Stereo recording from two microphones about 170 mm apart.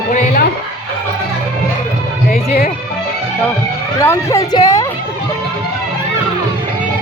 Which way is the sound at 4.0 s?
15° left (ahead or behind).